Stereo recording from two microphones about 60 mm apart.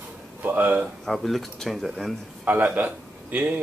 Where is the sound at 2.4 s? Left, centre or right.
Right.